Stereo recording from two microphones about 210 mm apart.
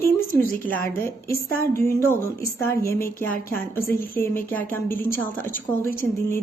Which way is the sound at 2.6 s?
15° left (ahead or behind).